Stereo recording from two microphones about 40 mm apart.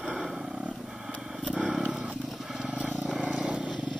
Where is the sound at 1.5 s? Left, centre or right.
Centre.